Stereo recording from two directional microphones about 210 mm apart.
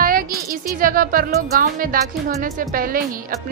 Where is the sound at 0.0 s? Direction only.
45° right (ahead or behind).